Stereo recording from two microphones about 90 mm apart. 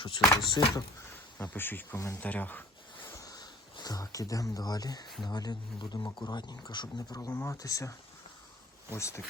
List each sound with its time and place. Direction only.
0.0 s speech: 55° left (ahead or behind)
1.1 s speech: 25° left (ahead or behind)
3.1 s speech: 40° left (ahead or behind)
7.3 s speech: 30° left (ahead or behind)
7.5 s speech: 40° left (ahead or behind)